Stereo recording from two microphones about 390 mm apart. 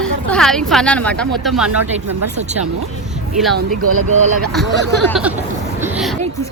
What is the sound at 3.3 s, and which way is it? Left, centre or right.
Speech, centre.